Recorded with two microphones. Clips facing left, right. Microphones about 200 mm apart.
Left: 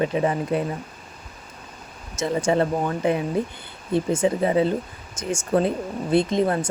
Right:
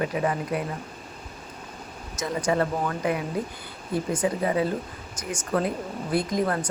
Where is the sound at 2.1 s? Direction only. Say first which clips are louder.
Left 4 dB; 25° left (ahead or behind).